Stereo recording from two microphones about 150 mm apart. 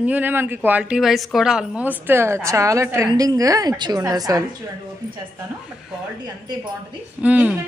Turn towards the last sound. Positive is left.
turn(degrees=-10)  # may be behind; listen again after turning